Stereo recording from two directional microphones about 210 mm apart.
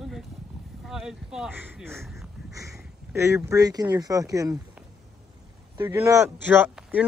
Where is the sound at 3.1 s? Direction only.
15° right (ahead or behind).